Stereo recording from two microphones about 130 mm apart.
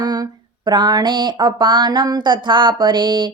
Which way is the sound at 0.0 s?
30° right (ahead or behind).